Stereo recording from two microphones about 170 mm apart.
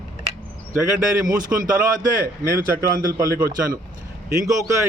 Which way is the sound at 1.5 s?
10° right (ahead or behind).